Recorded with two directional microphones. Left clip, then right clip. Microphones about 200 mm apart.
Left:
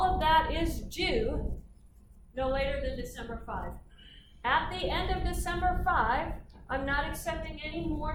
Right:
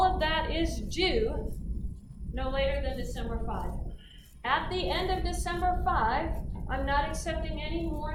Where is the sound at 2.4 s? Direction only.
40° right (ahead or behind).